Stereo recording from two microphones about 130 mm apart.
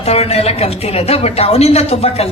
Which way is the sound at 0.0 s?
50° left (ahead or behind).